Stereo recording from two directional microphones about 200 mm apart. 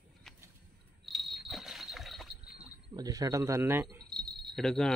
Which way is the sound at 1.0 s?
Centre (ahead or behind).